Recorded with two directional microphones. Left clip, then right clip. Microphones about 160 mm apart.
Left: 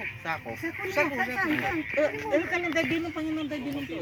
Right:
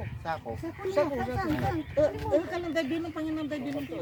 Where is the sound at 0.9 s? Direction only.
10° right (ahead or behind).